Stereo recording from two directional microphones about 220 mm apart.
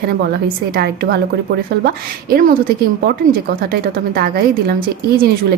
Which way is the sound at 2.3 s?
40° right (ahead or behind).